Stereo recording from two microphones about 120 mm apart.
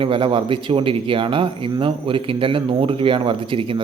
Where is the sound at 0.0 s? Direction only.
45° right (ahead or behind).